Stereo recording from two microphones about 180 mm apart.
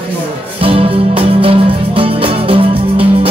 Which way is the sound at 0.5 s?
30° right (ahead or behind).